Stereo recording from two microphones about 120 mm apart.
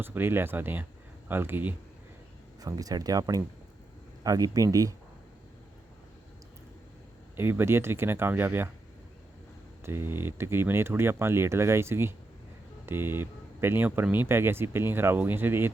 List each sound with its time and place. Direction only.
0.0 s speech: 15° right (ahead or behind)
2.6 s speech: 30° right (ahead or behind)
7.3 s speech: 20° right (ahead or behind)
9.8 s speech: 20° right (ahead or behind)